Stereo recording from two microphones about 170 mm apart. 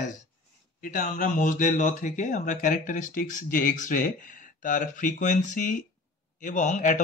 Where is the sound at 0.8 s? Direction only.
50° left (ahead or behind).